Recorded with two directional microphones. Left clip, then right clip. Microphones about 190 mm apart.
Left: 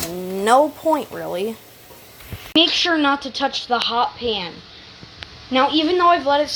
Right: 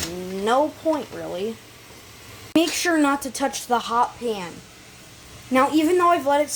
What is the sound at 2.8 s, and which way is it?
Speech, 15° right (ahead or behind).